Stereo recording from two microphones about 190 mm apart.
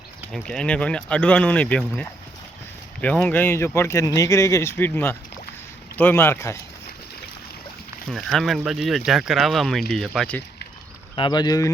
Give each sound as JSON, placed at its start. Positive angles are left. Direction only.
{"t": 0.3, "sound": "speech", "side_deg": 0}
{"t": 3.0, "sound": "speech", "side_deg": 10}
{"t": 8.1, "sound": "speech", "side_deg": 0}
{"t": 11.1, "sound": "speech", "side_deg": 25}